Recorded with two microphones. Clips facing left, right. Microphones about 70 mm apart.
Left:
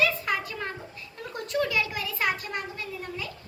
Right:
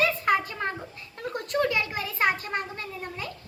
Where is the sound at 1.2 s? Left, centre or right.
Right.